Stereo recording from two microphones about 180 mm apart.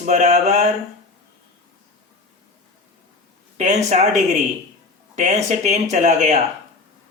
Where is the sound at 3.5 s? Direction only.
40° right (ahead or behind).